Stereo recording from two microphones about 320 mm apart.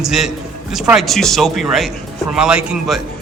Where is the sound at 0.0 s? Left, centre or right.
Centre.